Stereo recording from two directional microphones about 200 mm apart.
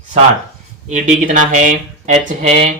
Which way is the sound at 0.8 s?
40° right (ahead or behind).